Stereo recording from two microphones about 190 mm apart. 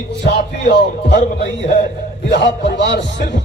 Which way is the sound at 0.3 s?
60° left (ahead or behind).